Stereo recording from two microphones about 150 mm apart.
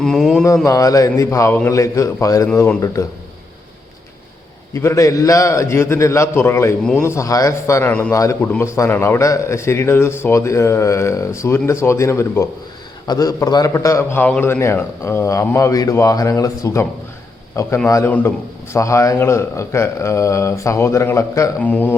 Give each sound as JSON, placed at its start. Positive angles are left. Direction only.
{"t": 0.0, "sound": "a sound", "side_deg": 0}
{"t": 0.4, "sound": "a man's voice", "side_deg": 20}
{"t": 4.7, "sound": "a man's voice", "side_deg": 20}
{"t": 17.8, "sound": "a man's voice", "side_deg": 20}